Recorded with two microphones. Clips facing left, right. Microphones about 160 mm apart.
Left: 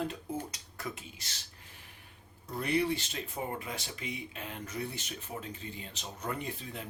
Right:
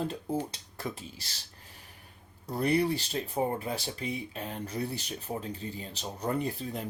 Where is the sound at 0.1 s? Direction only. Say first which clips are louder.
Right 5 dB; 30° right (ahead or behind).